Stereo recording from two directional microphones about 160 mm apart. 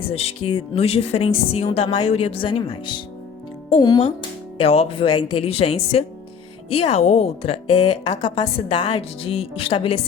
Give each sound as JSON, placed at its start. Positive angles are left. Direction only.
{"t": 0.1, "sound": "a woman's voice", "side_deg": 40}
{"t": 4.5, "sound": "a woman's voice", "side_deg": 40}